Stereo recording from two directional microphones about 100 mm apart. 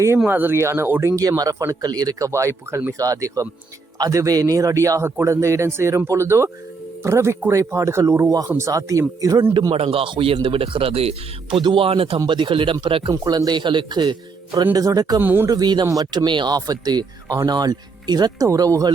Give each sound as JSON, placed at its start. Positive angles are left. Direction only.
{"t": 0.3, "sound": "a man's voice", "side_deg": -20}
{"t": 1.1, "sound": "a man's voice", "side_deg": -35}
{"t": 9.7, "sound": "speech", "side_deg": -70}
{"t": 11.6, "sound": "speech", "side_deg": -60}
{"t": 13.1, "sound": "a man's voice", "side_deg": -40}
{"t": 15.2, "sound": "a man's voice", "side_deg": -20}
{"t": 15.4, "sound": "speech", "side_deg": -40}
{"t": 18.4, "sound": "a man's voice", "side_deg": -35}